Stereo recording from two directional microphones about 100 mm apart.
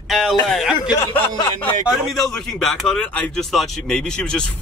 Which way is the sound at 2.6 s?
Centre (ahead or behind).